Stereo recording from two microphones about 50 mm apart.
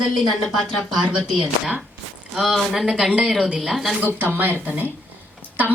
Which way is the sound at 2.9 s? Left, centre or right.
Centre.